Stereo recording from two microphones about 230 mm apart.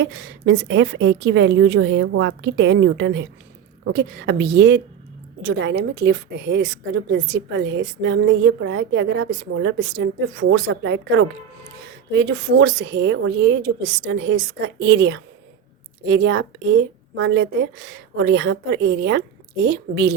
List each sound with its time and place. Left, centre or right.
0.0 s a woman's voice: right